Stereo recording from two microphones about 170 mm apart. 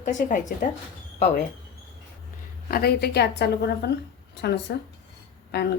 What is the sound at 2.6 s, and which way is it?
Speech, 65° left (ahead or behind).